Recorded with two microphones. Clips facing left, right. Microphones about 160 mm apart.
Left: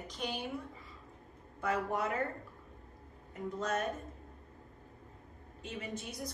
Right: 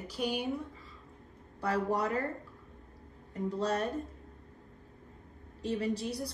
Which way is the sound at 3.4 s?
35° right (ahead or behind).